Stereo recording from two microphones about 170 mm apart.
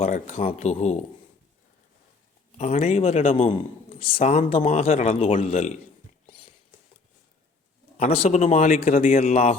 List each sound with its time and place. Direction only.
0.0 s speech: 40° left (ahead or behind)
2.6 s speech: 45° left (ahead or behind)
3.5 s speech: 35° left (ahead or behind)
7.9 s speech: 40° left (ahead or behind)
9.0 s a man's voice: 55° left (ahead or behind)
9.2 s speech: 40° left (ahead or behind)